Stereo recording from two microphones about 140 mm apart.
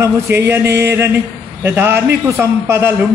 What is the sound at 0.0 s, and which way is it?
A man's voice, 20° right (ahead or behind).